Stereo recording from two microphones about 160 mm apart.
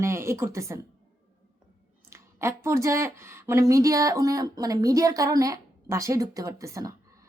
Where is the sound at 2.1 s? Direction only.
15° right (ahead or behind).